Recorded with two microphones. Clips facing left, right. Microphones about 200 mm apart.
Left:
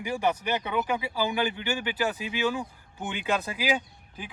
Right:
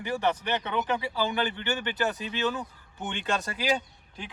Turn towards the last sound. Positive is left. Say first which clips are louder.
# left 1 dB
turn(degrees=5)  # may be behind; listen again after turning